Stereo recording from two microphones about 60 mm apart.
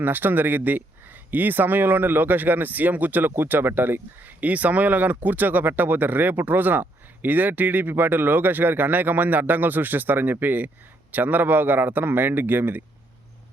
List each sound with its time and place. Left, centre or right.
0.0 s speech: right